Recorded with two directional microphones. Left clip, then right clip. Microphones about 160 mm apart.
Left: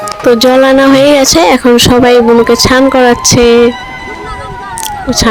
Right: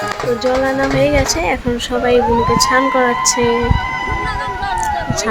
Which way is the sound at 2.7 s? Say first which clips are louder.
Left 7 dB; 60° left (ahead or behind).